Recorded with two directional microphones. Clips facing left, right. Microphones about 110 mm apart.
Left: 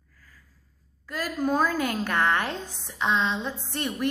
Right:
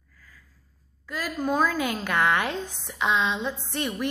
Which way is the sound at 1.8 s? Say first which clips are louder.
Even; 40° left (ahead or behind).